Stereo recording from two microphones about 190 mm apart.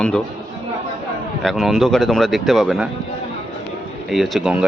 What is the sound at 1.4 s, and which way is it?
A man's voice, centre (ahead or behind).